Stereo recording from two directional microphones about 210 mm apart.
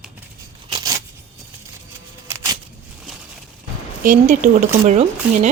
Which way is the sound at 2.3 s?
10° right (ahead or behind).